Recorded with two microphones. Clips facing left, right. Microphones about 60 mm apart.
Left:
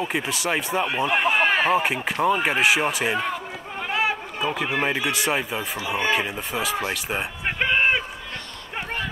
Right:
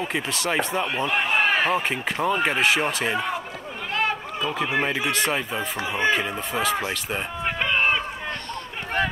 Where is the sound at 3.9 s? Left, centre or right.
Centre.